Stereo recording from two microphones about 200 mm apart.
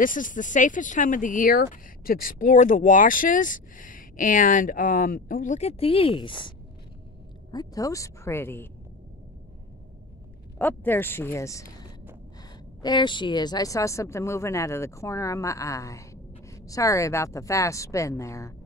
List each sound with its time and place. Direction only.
0.0 s speech: 40° left (ahead or behind); by 6.5 s 25° left (ahead or behind)
7.5 s a woman's voice: 15° left (ahead or behind)
10.6 s a woman's voice: 10° left (ahead or behind)
12.8 s a woman's voice: 20° left (ahead or behind)